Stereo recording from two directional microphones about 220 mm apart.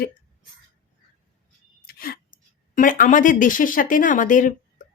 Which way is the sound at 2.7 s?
40° left (ahead or behind).